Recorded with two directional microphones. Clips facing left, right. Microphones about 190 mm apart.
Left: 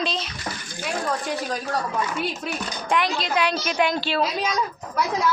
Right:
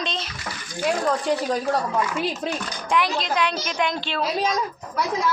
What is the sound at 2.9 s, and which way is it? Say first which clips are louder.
A woman's voice: even; centre (ahead or behind).